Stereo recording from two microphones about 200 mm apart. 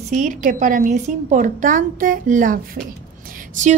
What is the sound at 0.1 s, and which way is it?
Speech, 40° right (ahead or behind).